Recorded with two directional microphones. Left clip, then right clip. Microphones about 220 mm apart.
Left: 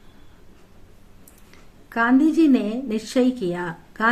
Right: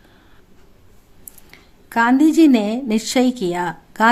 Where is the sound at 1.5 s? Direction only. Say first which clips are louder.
Right 7 dB; 45° right (ahead or behind).